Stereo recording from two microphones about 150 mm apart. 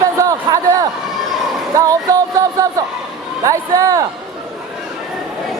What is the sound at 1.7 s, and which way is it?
Music, 25° right (ahead or behind).